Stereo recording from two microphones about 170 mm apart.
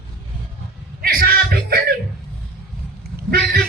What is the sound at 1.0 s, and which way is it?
Music, 60° right (ahead or behind).